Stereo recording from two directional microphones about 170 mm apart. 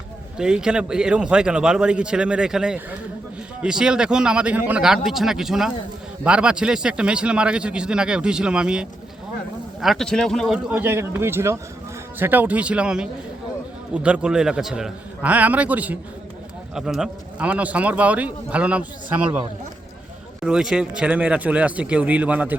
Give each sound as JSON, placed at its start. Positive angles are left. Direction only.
{"t": 0.3, "sound": "a man's voice", "side_deg": -5}